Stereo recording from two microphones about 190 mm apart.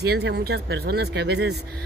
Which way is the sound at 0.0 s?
60° right (ahead or behind).